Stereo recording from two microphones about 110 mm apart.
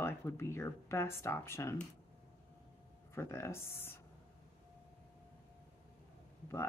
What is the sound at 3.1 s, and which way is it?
Speech, 25° left (ahead or behind).